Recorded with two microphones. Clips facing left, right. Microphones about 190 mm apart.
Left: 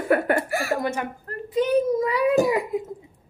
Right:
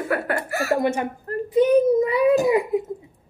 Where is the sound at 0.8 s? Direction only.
20° right (ahead or behind).